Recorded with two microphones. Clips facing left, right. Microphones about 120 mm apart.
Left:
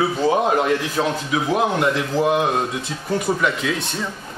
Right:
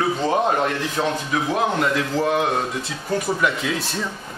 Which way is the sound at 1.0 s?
10° left (ahead or behind).